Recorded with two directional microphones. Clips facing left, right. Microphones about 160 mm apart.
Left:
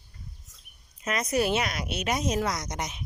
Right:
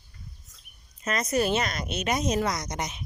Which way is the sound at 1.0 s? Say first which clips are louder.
Right 1 dB; 10° left (ahead or behind).